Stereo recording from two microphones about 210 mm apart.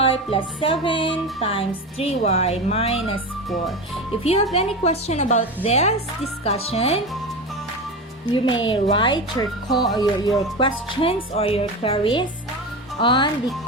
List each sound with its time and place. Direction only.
0.0 s speech: 25° left (ahead or behind)
4.2 s a woman's voice: 30° left (ahead or behind)
8.3 s speech: 25° left (ahead or behind)